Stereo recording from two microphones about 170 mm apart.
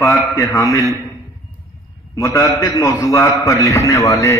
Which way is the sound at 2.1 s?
20° left (ahead or behind).